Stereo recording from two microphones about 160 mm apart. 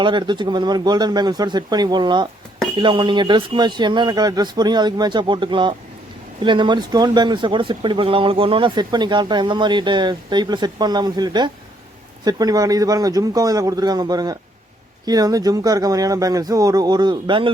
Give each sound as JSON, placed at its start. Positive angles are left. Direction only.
{"t": 0.0, "sound": "speech", "side_deg": -30}